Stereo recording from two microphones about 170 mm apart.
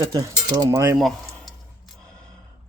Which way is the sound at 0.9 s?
Centre (ahead or behind).